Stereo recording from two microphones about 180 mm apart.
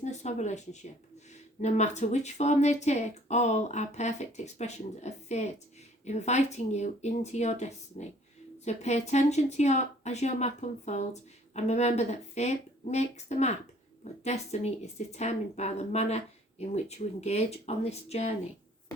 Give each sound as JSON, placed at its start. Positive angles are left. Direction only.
{"t": 0.0, "sound": "speech", "side_deg": 40}